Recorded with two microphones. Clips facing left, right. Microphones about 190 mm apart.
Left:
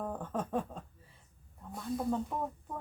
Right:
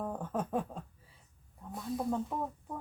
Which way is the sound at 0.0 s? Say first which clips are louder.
Right 1 dB; 10° right (ahead or behind).